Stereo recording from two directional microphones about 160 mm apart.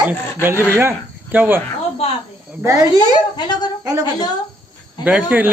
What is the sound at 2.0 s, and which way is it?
Speech, 40° left (ahead or behind).